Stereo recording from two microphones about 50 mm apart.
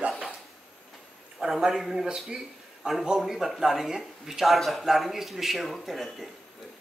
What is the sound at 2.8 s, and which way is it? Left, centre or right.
Speech, centre.